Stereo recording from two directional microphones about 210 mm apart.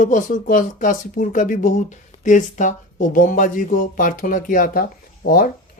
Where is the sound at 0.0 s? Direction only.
40° left (ahead or behind).